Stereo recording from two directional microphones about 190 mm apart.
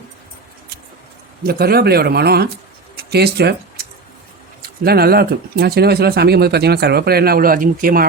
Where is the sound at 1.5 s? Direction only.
55° right (ahead or behind).